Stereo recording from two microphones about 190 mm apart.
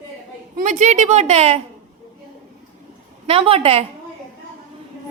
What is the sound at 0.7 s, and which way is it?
Speech, 40° right (ahead or behind).